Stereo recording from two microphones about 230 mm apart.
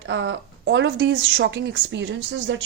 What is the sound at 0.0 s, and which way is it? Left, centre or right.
Speech, right.